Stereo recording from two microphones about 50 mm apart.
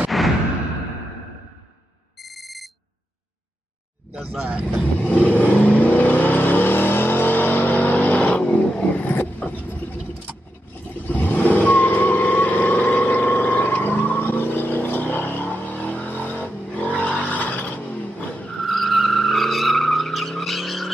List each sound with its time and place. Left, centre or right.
0.1 s a sound: centre
2.2 s ringtone: centre
4.1 s speech: right
5.3 s vehicle: left
9.1 s vehicle: left
11.1 s vehicle: left
18.6 s vehicle: centre